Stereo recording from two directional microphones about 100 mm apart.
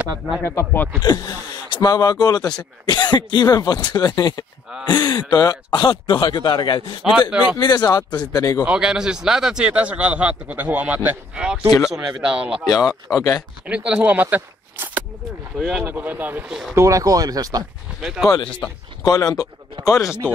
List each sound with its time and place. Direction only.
0.4 s speech: 25° left (ahead or behind)
1.0 s speech: 40° left (ahead or behind)
7.1 s a man's voice: 10° right (ahead or behind)
7.5 s speech: 45° left (ahead or behind)
8.6 s a man's voice: 10° right (ahead or behind)
12.6 s speech: 40° left (ahead or behind)
13.7 s speech: 10° right (ahead or behind)
16.7 s speech: 35° right (ahead or behind)
18.0 s speech: 5° right (ahead or behind)
19.0 s speech: 40° left (ahead or behind)